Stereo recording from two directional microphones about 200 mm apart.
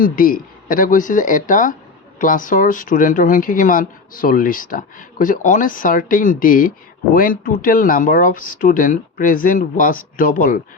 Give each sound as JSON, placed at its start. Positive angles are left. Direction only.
{"t": 0.0, "sound": "speech", "side_deg": 45}